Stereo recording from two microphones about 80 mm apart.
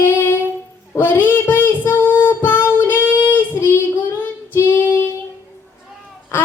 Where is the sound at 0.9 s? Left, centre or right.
Left.